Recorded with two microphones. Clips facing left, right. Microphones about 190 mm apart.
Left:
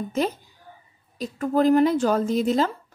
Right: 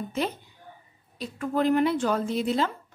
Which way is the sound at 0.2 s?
45° left (ahead or behind).